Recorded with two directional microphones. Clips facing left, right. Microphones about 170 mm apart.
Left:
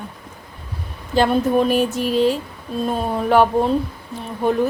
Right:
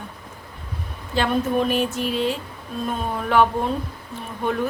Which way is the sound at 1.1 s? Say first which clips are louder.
Left 5 dB; 40° left (ahead or behind).